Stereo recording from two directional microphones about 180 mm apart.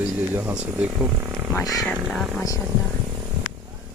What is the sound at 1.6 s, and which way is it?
Speech, centre (ahead or behind).